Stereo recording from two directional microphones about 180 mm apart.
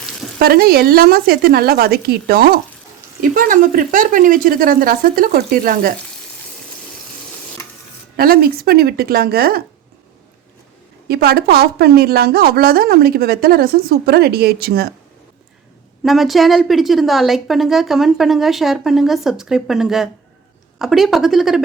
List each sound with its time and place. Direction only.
0.3 s a woman's voice: 55° right (ahead or behind)
8.1 s a woman's voice: 55° right (ahead or behind)
11.1 s a woman's voice: 60° right (ahead or behind)
16.0 s speech: centre (ahead or behind)